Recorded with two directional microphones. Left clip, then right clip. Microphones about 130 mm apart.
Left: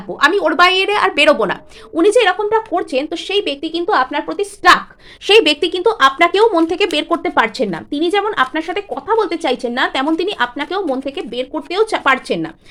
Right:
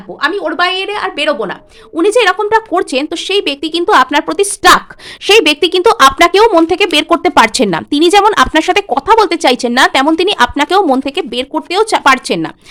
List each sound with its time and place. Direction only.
0.2 s a woman's voice: 20° left (ahead or behind)
2.0 s a woman's voice: 30° right (ahead or behind)
2.4 s a woman's voice: 55° right (ahead or behind); by 4.8 s 75° right (ahead or behind)
5.2 s speech: 30° right (ahead or behind)
5.8 s speech: 55° right (ahead or behind)
9.9 s speech: 35° right (ahead or behind)
10.4 s a woman's voice: 55° right (ahead or behind)
11.0 s speech: 45° right (ahead or behind)